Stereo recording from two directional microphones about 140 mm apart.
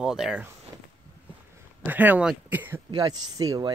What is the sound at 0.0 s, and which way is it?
Speech, 5° right (ahead or behind).